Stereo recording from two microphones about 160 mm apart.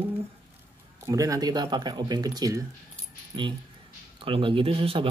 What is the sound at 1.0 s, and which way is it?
A man's voice, 20° right (ahead or behind).